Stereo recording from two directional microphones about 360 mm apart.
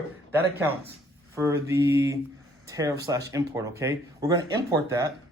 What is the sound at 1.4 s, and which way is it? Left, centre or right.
Speech, centre.